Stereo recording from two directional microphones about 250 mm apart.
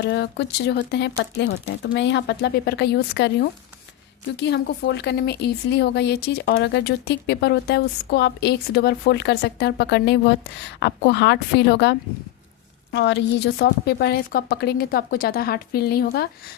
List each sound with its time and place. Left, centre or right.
0.0 s a woman's voice: left